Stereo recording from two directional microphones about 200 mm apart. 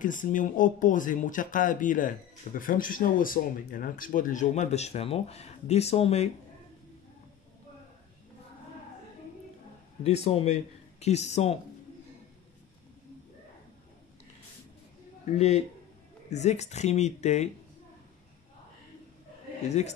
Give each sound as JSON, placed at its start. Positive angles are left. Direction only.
{"t": 0.0, "sound": "speech", "side_deg": 40}
{"t": 10.0, "sound": "speech", "side_deg": 30}
{"t": 15.2, "sound": "speech", "side_deg": 35}